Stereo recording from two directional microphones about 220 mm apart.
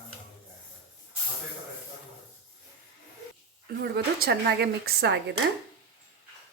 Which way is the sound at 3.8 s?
45° right (ahead or behind).